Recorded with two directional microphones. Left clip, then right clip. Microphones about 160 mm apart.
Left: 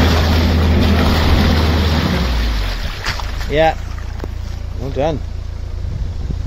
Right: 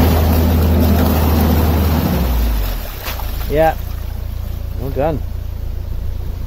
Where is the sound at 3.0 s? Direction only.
Centre (ahead or behind).